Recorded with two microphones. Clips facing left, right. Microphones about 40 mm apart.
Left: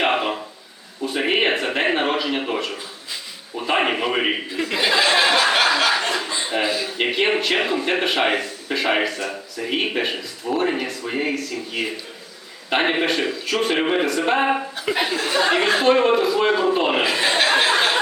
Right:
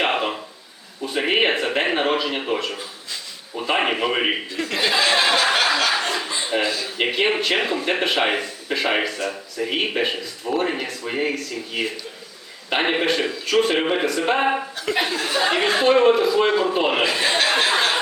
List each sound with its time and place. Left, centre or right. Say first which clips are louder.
0.0 s a sound: left 1 dB; centre
3.5 s speech: left 1 dB; centre
4.5 s chuckle: left 3 dB; centre
6.6 s a man's voice: left 3 dB; centre
7.0 s speech: even; centre